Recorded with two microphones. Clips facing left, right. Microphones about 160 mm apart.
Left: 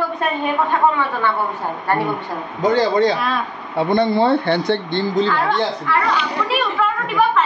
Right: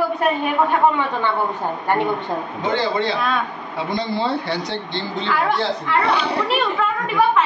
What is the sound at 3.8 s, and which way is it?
Speech, 55° left (ahead or behind).